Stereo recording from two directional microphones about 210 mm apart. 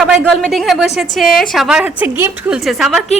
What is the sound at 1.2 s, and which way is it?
Speech, 40° left (ahead or behind).